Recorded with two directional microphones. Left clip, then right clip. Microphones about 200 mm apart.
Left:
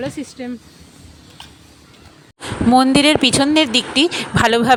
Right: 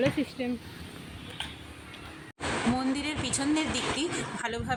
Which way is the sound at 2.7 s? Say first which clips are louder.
Left 19 dB; 50° left (ahead or behind).